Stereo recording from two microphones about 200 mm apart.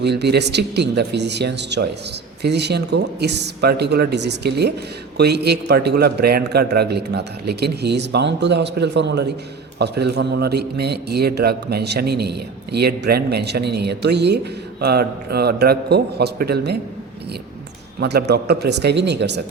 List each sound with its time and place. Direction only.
0.0 s a man's voice: 55° right (ahead or behind)
18.0 s a man's voice: 55° right (ahead or behind)